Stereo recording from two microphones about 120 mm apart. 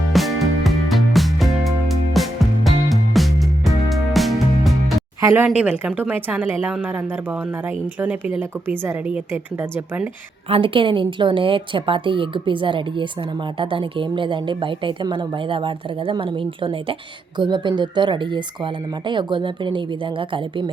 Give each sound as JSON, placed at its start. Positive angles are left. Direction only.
{"t": 0.1, "sound": "music", "side_deg": 0}
{"t": 5.2, "sound": "a woman's voice", "side_deg": -20}
{"t": 10.5, "sound": "a woman's voice", "side_deg": -45}